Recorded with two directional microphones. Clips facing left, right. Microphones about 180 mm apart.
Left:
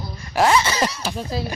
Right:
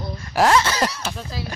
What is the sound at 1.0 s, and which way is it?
Speech, 15° left (ahead or behind).